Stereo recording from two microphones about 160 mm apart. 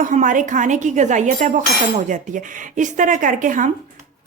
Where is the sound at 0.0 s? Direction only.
55° right (ahead or behind).